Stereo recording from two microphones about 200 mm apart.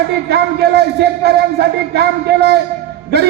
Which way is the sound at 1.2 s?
55° right (ahead or behind).